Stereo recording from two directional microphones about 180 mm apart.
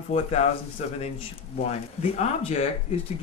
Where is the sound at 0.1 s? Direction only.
35° left (ahead or behind).